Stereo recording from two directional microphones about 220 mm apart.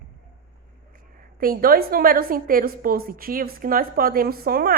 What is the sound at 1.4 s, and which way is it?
A woman's voice, 40° right (ahead or behind).